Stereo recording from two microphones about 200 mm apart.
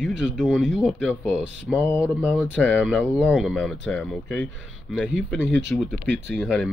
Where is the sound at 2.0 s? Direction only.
Centre (ahead or behind).